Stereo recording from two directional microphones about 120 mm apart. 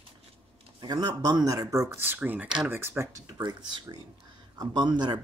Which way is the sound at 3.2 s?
35° right (ahead or behind).